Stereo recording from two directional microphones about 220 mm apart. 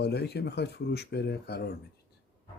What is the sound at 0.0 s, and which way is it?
Speech, 50° left (ahead or behind).